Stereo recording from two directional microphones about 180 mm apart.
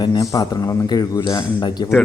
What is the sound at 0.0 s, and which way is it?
A man's voice, 20° left (ahead or behind).